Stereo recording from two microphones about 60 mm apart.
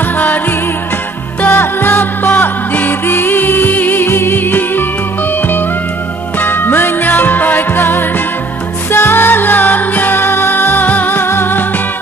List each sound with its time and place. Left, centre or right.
1.4 s music: left
6.4 s music: left